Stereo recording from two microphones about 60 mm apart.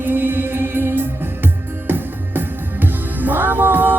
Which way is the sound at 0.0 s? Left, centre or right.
Right.